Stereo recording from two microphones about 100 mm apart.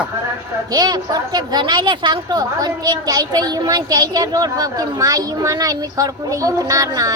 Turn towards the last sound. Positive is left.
turn(degrees=-35)  # may be behind; listen again after turning